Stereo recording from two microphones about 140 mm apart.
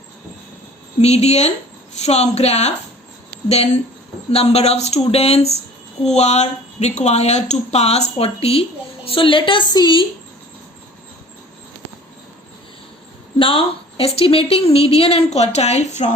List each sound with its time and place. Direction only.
1.0 s a woman's voice: 50° left (ahead or behind); by 10.1 s 35° left (ahead or behind)
13.4 s a woman's voice: 40° left (ahead or behind); by 16.1 s 55° left (ahead or behind)